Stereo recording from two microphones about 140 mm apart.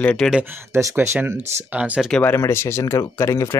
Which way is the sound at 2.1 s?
10° left (ahead or behind).